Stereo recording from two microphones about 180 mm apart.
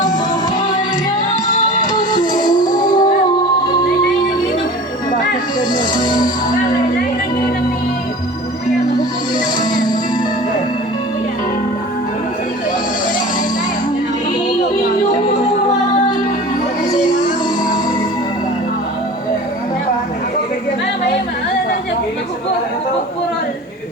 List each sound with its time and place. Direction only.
1.9 s music: 25° left (ahead or behind)
5.5 s music: 25° left (ahead or behind)